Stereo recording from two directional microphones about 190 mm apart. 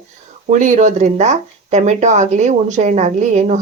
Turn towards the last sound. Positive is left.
turn(degrees=-40)  # may be behind; listen again after turning